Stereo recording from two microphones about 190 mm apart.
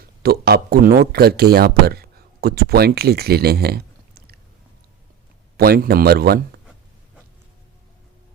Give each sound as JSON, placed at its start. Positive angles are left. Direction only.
{"t": 0.2, "sound": "speech", "side_deg": -55}
{"t": 5.5, "sound": "speech", "side_deg": -55}